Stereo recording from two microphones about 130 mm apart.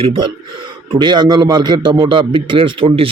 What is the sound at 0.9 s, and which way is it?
A man's voice, 35° right (ahead or behind).